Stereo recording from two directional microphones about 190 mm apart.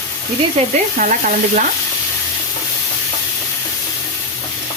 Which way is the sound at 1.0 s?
40° right (ahead or behind).